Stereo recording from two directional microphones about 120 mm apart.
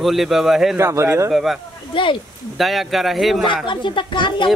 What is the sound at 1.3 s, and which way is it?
Speech, centre (ahead or behind).